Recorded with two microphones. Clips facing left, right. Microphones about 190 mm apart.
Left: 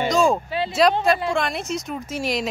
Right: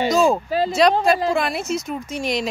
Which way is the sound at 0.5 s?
40° right (ahead or behind).